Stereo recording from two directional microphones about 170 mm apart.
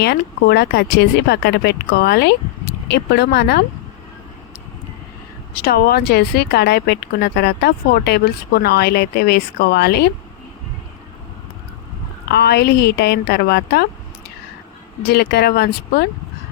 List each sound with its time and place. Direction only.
0.0 s speech: 75° left (ahead or behind)
5.6 s speech: 65° left (ahead or behind)
12.3 s speech: 75° left (ahead or behind)
15.0 s speech: 75° left (ahead or behind)